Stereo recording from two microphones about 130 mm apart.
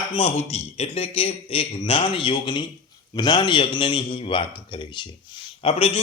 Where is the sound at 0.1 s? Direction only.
50° left (ahead or behind).